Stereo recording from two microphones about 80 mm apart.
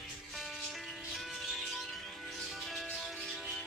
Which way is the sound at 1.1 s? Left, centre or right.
Centre.